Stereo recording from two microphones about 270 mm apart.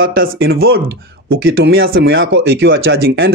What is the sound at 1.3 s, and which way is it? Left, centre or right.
Speech, right.